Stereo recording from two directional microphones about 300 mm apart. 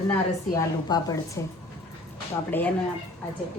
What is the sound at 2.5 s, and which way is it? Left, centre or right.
Speech, centre.